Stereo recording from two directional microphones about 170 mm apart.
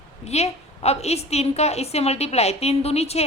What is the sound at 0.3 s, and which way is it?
A woman's voice, 40° left (ahead or behind).